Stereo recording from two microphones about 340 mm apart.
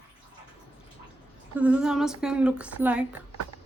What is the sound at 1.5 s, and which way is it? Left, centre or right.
A woman's voice, centre.